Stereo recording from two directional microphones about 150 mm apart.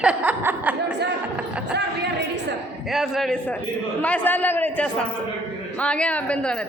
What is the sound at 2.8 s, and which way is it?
A man's voice, centre (ahead or behind).